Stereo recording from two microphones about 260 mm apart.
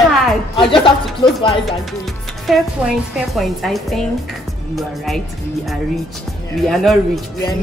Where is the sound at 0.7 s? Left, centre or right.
Centre.